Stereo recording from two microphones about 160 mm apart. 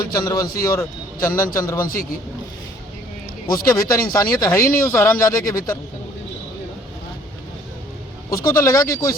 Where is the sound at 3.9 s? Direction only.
20° left (ahead or behind).